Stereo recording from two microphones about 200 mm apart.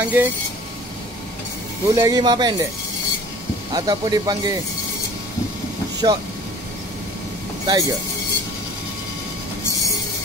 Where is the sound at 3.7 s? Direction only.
20° right (ahead or behind).